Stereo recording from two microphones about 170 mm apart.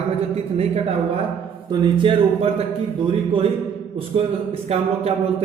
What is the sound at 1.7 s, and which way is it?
Speech, 30° right (ahead or behind).